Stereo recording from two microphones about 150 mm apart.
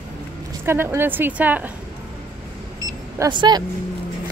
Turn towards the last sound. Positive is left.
turn(degrees=-30)  # may be behind; listen again after turning